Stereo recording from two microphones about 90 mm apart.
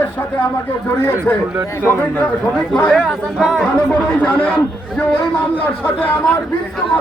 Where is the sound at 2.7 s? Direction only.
10° left (ahead or behind).